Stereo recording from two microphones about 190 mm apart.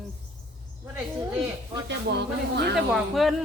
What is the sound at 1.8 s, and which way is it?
Speech, 60° right (ahead or behind).